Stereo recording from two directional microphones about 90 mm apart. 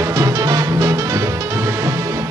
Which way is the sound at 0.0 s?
35° right (ahead or behind).